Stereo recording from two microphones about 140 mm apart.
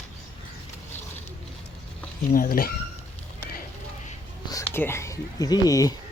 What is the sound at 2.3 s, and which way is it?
Speech, 90° left.